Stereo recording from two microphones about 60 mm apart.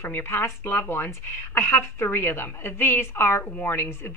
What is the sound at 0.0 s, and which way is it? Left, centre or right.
A woman's voice, left.